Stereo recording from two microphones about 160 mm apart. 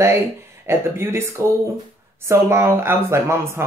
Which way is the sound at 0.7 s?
15° right (ahead or behind).